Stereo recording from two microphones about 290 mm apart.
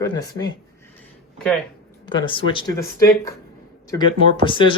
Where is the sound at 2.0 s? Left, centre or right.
Centre.